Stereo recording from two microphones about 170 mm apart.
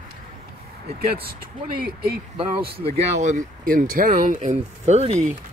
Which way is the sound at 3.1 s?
45° right (ahead or behind).